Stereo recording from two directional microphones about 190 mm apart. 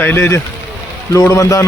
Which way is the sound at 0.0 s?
10° left (ahead or behind).